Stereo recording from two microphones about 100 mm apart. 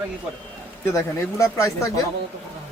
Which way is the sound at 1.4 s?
30° left (ahead or behind).